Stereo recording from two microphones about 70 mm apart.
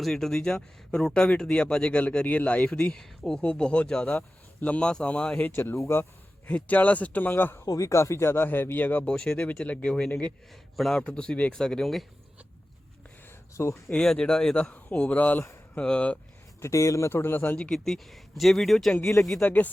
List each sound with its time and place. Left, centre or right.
0.0 s speech: centre
5.4 s speech: left
6.5 s speech: left
7.6 s speech: left
9.0 s speech: centre
9.6 s speech: centre
10.8 s speech: centre
11.0 s speech: centre
13.6 s speech: left
13.9 s speech: centre
16.6 s speech: left
17.1 s speech: left
17.5 s speech: centre
19.4 s speech: left